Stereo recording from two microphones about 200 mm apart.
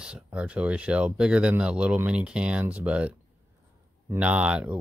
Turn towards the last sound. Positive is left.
turn(degrees=-5)  # may be behind; listen again after turning